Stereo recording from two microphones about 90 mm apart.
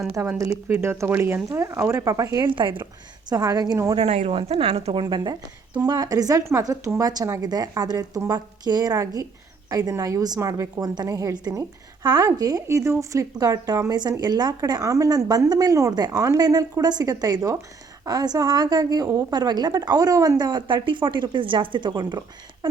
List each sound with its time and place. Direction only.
0.3 s a woman's voice: 30° right (ahead or behind)
2.5 s a woman's voice: 65° right (ahead or behind)
3.2 s speech: 40° right (ahead or behind)
3.9 s a woman's voice: 80° right; by 12.6 s 40° right (ahead or behind)
12.6 s speech: 30° right (ahead or behind)
20.4 s speech: 55° right (ahead or behind)